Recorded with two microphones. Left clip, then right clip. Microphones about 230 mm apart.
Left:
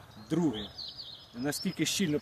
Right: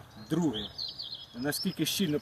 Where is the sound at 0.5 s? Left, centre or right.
Right.